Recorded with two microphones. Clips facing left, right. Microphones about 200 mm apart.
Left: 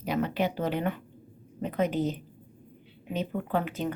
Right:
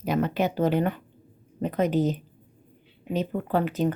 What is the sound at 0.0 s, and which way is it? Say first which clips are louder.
A woman's voice: right 3 dB; 45° right (ahead or behind).